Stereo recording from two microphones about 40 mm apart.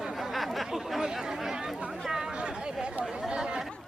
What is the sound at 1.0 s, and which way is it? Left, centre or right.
Chatter, centre.